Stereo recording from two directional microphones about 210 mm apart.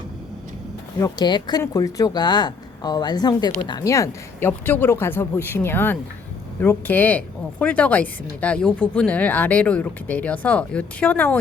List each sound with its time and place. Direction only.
0.9 s speech: 20° left (ahead or behind)